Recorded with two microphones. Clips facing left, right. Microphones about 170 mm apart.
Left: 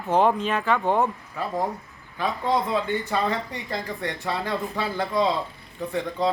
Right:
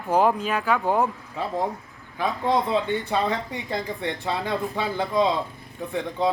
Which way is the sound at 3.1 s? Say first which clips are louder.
Right 1 dB; 15° right (ahead or behind).